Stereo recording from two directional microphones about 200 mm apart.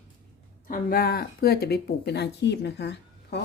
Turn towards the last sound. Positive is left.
turn(degrees=60)  # may be behind; listen again after turning